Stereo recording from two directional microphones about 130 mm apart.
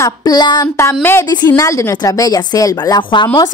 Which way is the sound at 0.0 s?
30° left (ahead or behind).